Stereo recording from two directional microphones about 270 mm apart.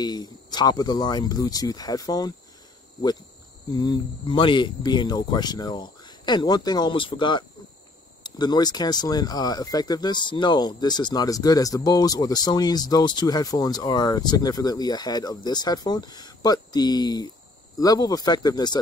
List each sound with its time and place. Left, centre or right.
0.0 s speech: centre
3.7 s speech: centre